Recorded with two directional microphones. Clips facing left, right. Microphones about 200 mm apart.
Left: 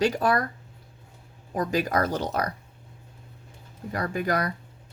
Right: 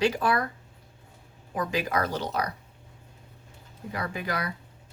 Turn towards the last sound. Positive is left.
turn(degrees=45)  # may be behind; listen again after turning